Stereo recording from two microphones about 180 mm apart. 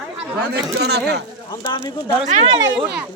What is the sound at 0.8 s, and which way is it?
Speech, 65° right (ahead or behind).